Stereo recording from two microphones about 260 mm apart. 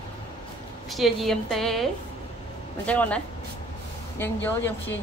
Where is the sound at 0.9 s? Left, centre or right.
Centre.